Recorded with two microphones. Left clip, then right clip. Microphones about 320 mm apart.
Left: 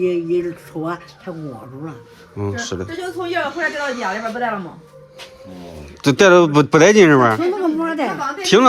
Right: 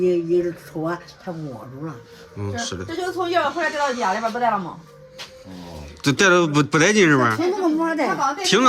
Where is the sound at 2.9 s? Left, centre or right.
Right.